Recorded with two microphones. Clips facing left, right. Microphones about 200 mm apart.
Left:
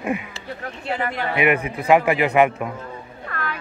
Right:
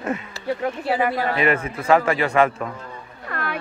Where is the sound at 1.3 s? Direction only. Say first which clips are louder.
Left 1 dB; 15° left (ahead or behind).